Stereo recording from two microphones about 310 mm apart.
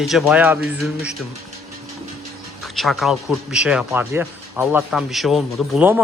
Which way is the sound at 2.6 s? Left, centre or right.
Centre.